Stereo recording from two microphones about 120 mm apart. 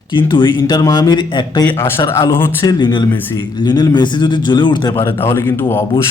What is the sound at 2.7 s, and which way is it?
Speech, 40° left (ahead or behind).